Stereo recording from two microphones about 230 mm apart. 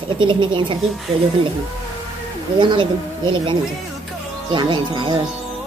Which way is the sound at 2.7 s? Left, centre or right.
Right.